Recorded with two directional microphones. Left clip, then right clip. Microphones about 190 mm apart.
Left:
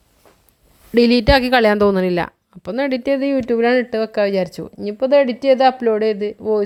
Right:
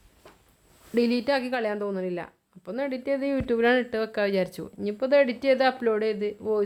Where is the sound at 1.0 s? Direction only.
40° left (ahead or behind).